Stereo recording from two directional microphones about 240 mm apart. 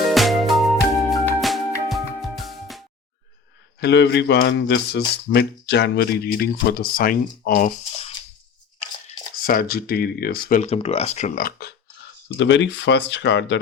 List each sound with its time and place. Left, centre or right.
0.1 s music: centre
3.8 s speech: left
9.5 s speech: left
12.4 s speech: left